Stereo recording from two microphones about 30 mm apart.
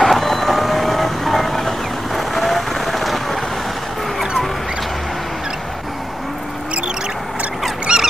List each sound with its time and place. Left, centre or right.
0.0 s vehicle: centre
7.9 s dog: right